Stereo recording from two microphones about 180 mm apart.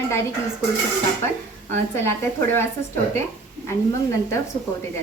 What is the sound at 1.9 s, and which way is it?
Speech, 15° left (ahead or behind).